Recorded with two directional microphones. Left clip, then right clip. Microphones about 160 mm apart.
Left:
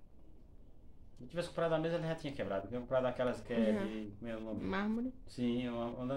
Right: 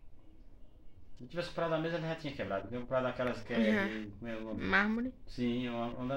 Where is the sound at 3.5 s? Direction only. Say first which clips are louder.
Right 3 dB; centre (ahead or behind).